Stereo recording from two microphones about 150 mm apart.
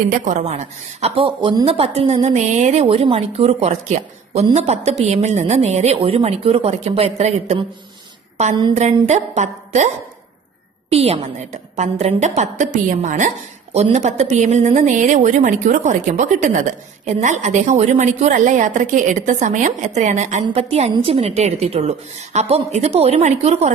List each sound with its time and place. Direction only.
0.1 s a woman's voice: 55° right (ahead or behind)
8.7 s a woman's voice: 50° right (ahead or behind)